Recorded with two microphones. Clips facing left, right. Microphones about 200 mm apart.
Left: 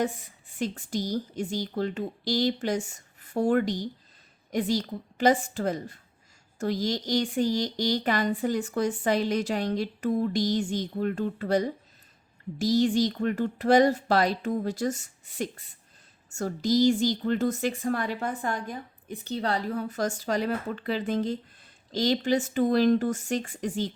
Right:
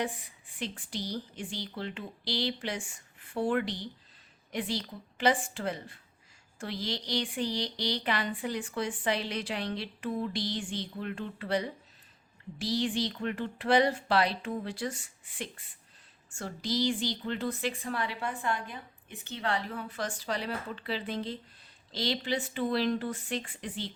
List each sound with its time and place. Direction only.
0.0 s a woman's voice: 45° left (ahead or behind)